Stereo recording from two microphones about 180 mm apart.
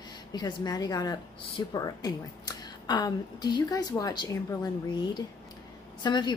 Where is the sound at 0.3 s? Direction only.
25° left (ahead or behind).